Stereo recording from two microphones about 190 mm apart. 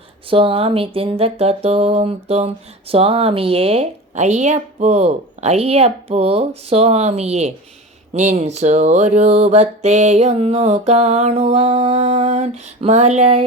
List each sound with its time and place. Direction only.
0.3 s speech: 30° right (ahead or behind)